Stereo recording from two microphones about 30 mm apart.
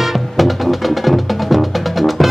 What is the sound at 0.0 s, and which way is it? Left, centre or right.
Music, centre.